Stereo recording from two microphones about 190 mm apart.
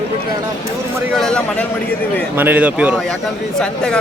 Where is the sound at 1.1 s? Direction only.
5° left (ahead or behind).